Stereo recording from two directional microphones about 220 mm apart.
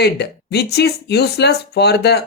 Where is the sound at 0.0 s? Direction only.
50° left (ahead or behind).